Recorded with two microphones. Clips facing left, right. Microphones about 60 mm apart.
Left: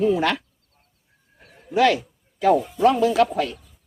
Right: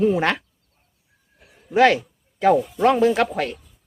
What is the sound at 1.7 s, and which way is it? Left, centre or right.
A man's voice, right.